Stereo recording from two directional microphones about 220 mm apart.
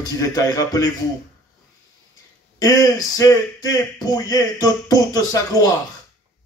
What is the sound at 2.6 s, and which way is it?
Speech, 15° left (ahead or behind).